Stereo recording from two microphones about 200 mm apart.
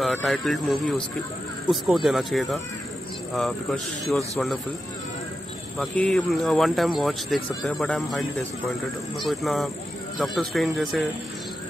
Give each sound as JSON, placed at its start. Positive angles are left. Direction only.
{"t": 0.0, "sound": "speech", "side_deg": 0}
{"t": 5.8, "sound": "speech", "side_deg": 5}